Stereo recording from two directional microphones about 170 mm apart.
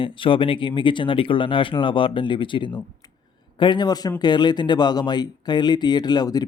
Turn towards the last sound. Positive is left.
turn(degrees=25)  # may be behind; listen again after turning